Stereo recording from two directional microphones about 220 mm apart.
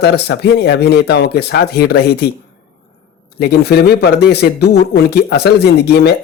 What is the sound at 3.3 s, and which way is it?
A man's voice, 45° left (ahead or behind).